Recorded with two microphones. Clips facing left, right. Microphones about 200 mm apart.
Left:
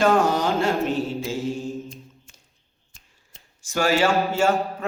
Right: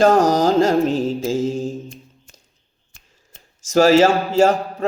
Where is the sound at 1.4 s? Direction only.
90° right.